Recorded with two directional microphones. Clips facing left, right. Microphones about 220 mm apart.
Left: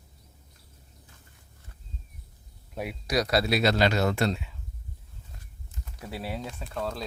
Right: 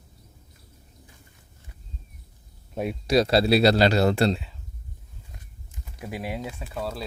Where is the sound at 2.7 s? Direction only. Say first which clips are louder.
Right 6 dB; 25° right (ahead or behind).